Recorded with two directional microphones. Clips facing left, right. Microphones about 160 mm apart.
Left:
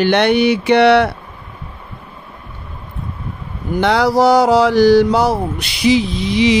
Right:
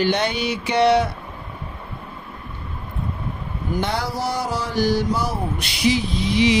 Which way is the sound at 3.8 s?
90° left.